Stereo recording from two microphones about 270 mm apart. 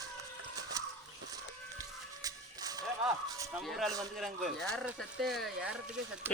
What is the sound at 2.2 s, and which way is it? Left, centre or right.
Music, centre.